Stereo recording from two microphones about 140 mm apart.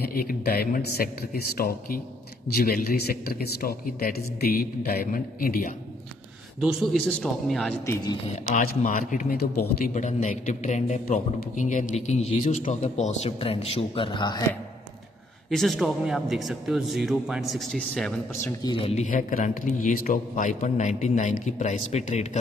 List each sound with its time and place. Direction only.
0.0 s a man's voice: 90° left
6.6 s a man's voice: centre (ahead or behind)
7.8 s speech: 25° left (ahead or behind)
8.5 s speech: 70° left (ahead or behind)
9.8 s a man's voice: 60° left (ahead or behind); by 14.4 s 35° left (ahead or behind)
15.5 s a man's voice: centre (ahead or behind)
18.7 s speech: 45° left (ahead or behind)
19.0 s a man's voice: 65° left (ahead or behind)